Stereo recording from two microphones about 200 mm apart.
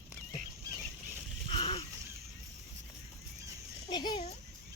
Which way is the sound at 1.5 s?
30° left (ahead or behind).